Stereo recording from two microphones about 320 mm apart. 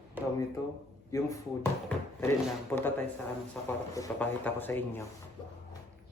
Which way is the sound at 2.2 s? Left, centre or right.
Centre.